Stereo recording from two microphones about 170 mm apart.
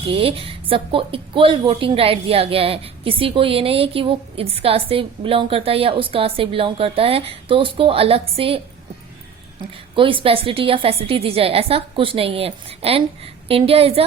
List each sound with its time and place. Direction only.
0.1 s a woman's voice: 35° right (ahead or behind)
9.9 s a woman's voice: 30° right (ahead or behind)